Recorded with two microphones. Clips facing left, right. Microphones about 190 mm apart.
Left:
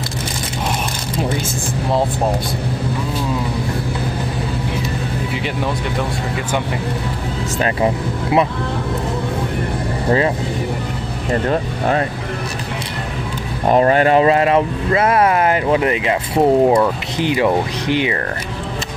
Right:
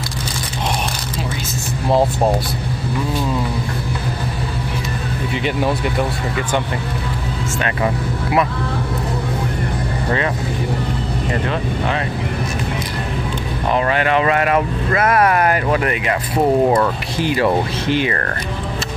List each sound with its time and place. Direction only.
7.6 s speech: 25° left (ahead or behind)
10.0 s speech: 30° left (ahead or behind)
13.7 s speech: 40° left (ahead or behind); by 16.2 s 20° left (ahead or behind)
16.3 s speech: 10° left (ahead or behind)